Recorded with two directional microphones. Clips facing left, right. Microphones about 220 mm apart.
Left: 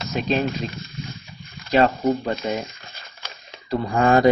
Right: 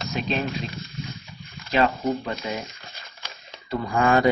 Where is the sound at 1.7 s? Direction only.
40° left (ahead or behind).